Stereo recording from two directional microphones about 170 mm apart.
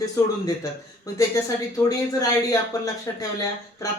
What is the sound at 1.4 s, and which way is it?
Speech, 20° left (ahead or behind).